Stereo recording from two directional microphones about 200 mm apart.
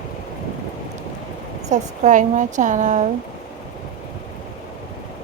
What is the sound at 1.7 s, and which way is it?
Speech, 40° right (ahead or behind).